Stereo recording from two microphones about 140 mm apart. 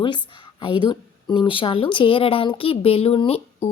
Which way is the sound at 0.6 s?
35° left (ahead or behind).